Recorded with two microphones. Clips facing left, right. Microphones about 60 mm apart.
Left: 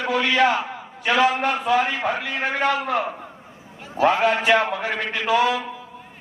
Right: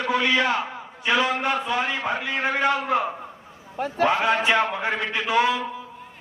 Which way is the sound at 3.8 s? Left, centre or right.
Right.